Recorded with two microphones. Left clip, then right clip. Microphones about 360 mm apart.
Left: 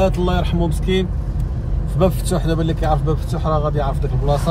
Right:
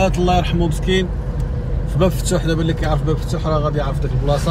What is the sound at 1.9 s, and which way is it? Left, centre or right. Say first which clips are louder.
A man's voice: even; centre.